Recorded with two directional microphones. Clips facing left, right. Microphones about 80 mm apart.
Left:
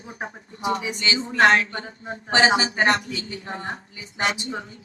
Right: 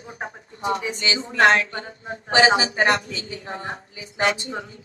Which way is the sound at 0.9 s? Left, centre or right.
Right.